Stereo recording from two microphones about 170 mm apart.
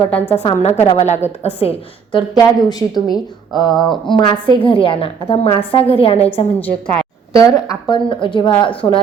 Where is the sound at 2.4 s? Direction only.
25° left (ahead or behind).